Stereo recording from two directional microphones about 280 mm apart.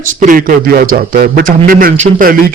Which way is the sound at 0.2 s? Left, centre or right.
Right.